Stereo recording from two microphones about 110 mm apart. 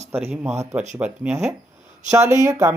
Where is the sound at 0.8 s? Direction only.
10° right (ahead or behind).